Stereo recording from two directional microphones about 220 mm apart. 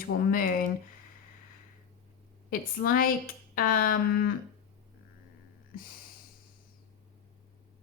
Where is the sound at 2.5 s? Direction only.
40° left (ahead or behind).